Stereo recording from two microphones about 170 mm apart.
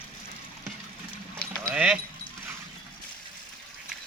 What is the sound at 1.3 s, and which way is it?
Keys jangling, 5° left (ahead or behind).